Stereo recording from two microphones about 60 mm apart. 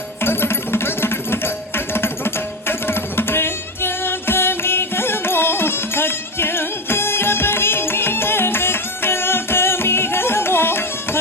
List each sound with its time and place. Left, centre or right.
0.2 s music: left